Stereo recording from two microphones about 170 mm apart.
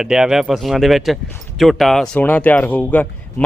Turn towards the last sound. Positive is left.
turn(degrees=10)  # may be behind; listen again after turning